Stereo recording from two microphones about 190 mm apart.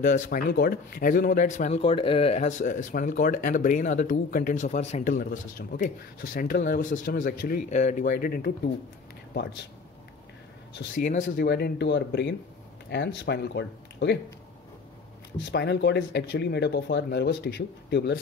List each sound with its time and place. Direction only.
0.0 s a man's voice: 45° left (ahead or behind)
9.3 s speech: 65° left (ahead or behind)
11.0 s a man's voice: 45° left (ahead or behind)
11.4 s speech: 60° left (ahead or behind)
15.5 s speech: 65° left (ahead or behind)